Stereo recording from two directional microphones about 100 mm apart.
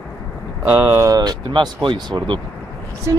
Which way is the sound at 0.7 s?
25° right (ahead or behind).